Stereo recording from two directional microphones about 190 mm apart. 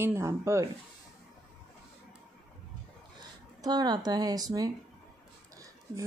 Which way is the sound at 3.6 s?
20° right (ahead or behind).